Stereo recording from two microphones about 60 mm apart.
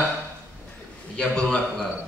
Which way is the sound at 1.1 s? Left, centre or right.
Centre.